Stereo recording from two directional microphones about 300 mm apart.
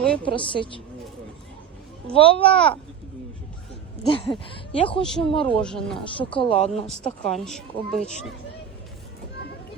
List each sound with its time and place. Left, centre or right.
0.0 s a woman's voice: centre
0.3 s a woman's voice: centre
2.1 s a woman's voice: centre
4.0 s a woman's voice: centre
5.0 s speech: centre
6.1 s a woman's voice: centre
7.0 s speech: centre